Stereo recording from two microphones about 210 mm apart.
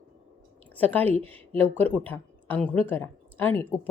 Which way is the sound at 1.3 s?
10° left (ahead or behind).